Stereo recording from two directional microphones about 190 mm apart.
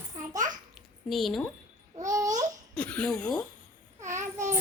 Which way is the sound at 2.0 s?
20° right (ahead or behind).